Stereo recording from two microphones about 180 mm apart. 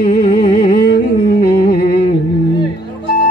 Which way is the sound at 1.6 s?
55° left (ahead or behind).